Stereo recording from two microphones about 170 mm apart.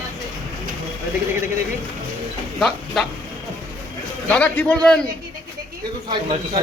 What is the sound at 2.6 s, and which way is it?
Speech, centre (ahead or behind).